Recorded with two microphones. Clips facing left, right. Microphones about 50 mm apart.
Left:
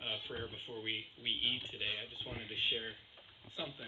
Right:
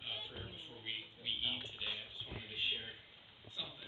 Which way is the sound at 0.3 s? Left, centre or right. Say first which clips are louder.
Left 6 dB; left.